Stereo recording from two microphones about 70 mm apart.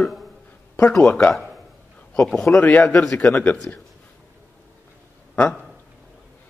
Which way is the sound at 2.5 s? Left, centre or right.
Left.